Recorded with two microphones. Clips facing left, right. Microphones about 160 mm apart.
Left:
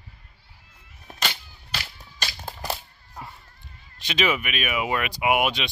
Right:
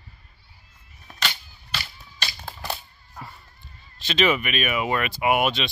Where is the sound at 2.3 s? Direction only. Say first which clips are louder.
Left 1 dB; 20° left (ahead or behind).